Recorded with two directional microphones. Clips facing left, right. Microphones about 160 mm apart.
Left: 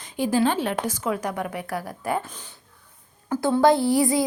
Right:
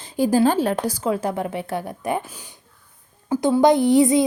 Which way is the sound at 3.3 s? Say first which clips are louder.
Right 3 dB; 15° right (ahead or behind).